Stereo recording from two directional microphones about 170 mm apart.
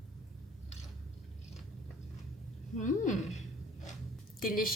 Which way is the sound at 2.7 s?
45° left (ahead or behind).